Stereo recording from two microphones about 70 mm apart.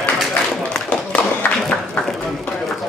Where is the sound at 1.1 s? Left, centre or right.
Left.